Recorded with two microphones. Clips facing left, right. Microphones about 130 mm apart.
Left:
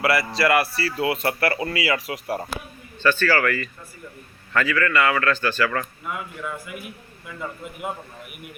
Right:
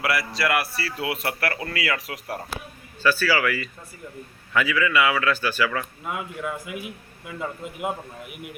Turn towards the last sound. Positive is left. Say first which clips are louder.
# right 2 dB
turn(degrees=-15)  # may be behind; listen again after turning